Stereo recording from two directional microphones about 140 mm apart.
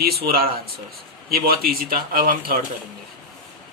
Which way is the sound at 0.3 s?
90° right.